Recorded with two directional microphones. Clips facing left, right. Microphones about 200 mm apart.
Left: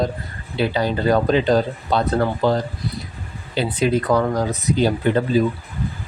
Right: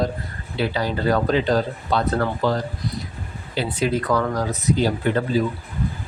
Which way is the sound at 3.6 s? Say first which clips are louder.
Left 3 dB; 20° left (ahead or behind).